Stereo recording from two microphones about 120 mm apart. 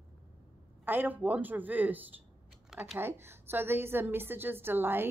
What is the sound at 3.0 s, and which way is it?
A woman's voice, 20° right (ahead or behind).